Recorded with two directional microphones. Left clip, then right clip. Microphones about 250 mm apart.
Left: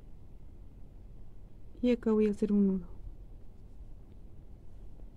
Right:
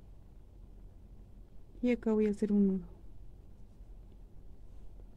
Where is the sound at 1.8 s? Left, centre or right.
Centre.